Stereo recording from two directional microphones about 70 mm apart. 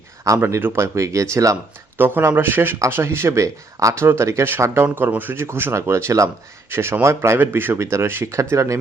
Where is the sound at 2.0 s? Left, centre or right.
Right.